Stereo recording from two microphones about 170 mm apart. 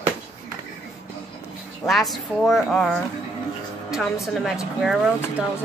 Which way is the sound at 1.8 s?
Centre (ahead or behind).